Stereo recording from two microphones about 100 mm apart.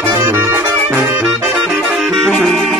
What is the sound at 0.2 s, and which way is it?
Music, 20° right (ahead or behind).